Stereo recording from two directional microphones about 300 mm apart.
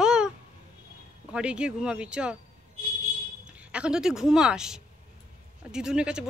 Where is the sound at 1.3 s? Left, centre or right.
Centre.